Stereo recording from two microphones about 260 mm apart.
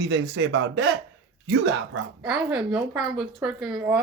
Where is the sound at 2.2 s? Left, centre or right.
Centre.